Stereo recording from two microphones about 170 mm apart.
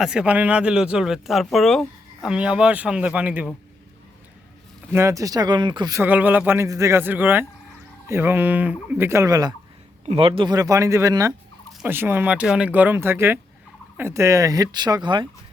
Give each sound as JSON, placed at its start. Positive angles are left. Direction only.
{"t": 0.0, "sound": "speech", "side_deg": -5}
{"t": 4.9, "sound": "speech", "side_deg": -15}
{"t": 10.1, "sound": "speech", "side_deg": -35}